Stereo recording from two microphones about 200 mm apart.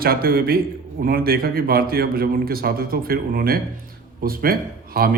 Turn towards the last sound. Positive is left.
turn(degrees=-45)  # may be behind; listen again after turning